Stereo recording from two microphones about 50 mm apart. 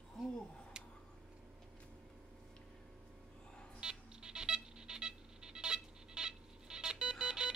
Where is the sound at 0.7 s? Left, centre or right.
Centre.